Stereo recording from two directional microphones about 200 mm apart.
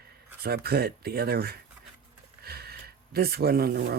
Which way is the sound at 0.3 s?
50° right (ahead or behind).